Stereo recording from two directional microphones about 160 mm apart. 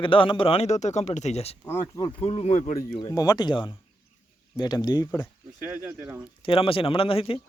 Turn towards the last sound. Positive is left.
turn(degrees=35)  # may be behind; listen again after turning